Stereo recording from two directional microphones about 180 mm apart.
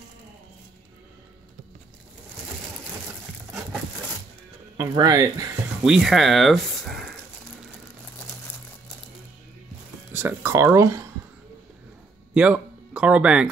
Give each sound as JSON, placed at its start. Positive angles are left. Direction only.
{"t": 4.7, "sound": "speech", "side_deg": -15}
{"t": 5.9, "sound": "speech", "side_deg": 0}
{"t": 10.1, "sound": "speech", "side_deg": -15}
{"t": 12.4, "sound": "speech", "side_deg": -5}